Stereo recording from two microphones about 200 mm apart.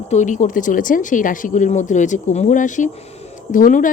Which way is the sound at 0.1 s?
35° left (ahead or behind).